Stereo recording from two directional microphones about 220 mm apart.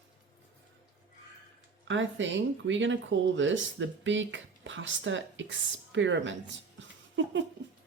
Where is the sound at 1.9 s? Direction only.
60° right (ahead or behind).